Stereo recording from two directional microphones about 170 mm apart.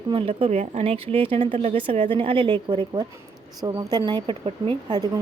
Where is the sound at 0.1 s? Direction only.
30° right (ahead or behind).